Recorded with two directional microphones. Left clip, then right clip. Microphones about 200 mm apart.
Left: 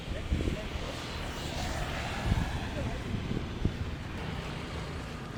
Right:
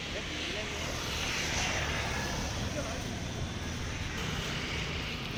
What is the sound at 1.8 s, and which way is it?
Vehicle, 45° right (ahead or behind).